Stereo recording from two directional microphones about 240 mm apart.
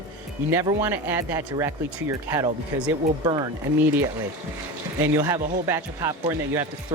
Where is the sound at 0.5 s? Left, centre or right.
Centre.